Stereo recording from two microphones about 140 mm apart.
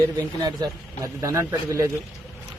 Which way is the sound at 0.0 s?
25° right (ahead or behind).